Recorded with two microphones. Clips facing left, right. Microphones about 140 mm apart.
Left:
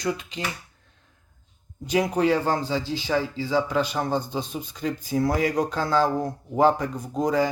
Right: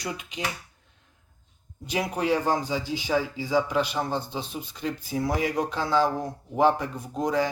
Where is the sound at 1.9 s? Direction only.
5° right (ahead or behind).